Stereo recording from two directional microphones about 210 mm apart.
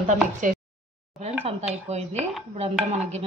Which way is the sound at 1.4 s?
30° right (ahead or behind).